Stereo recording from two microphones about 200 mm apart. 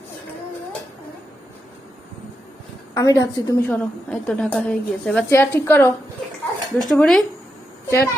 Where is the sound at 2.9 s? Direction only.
15° left (ahead or behind).